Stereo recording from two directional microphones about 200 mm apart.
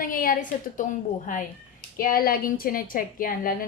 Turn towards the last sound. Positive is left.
turn(degrees=45)  # may be behind; listen again after turning